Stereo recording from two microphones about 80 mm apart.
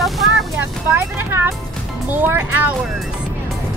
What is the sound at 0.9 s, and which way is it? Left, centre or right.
Speech, right.